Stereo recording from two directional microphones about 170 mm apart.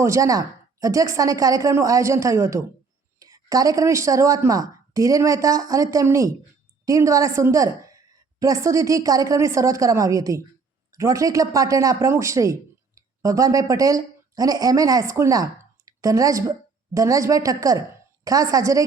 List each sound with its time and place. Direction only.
0.0 s a man's voice: 20° right (ahead or behind)